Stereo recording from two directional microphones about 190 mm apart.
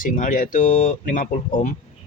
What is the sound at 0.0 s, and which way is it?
Speech, 45° left (ahead or behind).